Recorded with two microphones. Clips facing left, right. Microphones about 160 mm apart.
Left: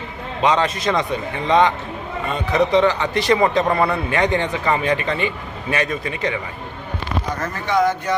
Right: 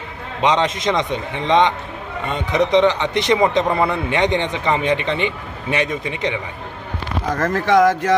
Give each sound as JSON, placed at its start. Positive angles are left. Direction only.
{"t": 0.4, "sound": "speech", "side_deg": -20}
{"t": 7.3, "sound": "speech", "side_deg": -90}